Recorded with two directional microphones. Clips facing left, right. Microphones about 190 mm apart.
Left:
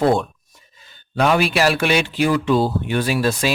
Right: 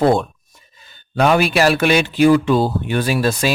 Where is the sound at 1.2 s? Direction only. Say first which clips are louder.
Right 2 dB; 45° right (ahead or behind).